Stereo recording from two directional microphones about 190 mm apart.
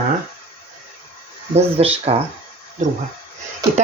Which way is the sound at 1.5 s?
35° right (ahead or behind).